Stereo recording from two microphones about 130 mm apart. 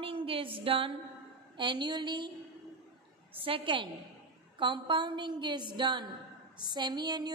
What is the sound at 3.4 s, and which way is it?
A woman's voice, 40° right (ahead or behind).